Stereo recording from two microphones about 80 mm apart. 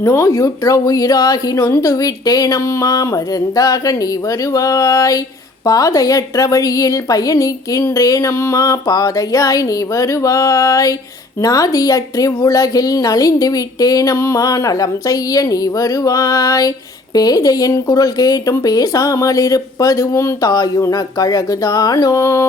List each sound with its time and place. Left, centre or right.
0.0 s a woman's voice: left
20.5 s a woman's voice: left